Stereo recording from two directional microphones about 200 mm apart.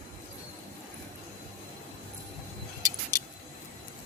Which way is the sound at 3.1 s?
20° right (ahead or behind).